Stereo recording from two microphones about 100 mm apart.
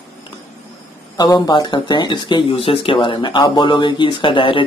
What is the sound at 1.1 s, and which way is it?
Speech, 45° left (ahead or behind).